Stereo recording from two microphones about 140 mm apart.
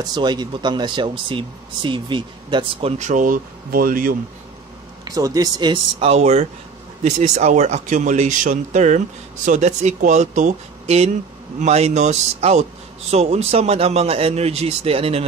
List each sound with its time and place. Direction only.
0.0 s speech: 30° right (ahead or behind)
3.0 s speech: 65° right (ahead or behind); by 4.2 s 90° right
5.0 s a man's voice: 25° right (ahead or behind); by 15.2 s 45° right (ahead or behind)